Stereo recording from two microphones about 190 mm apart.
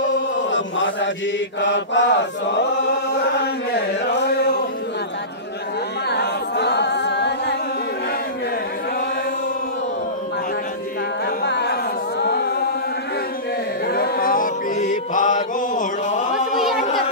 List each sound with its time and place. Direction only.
0.5 s chant: 75° left (ahead or behind)
4.1 s chant: 60° left (ahead or behind)
6.0 s singing: 60° left (ahead or behind)
11.2 s music: 60° left (ahead or behind)
13.8 s mantra: 55° left (ahead or behind)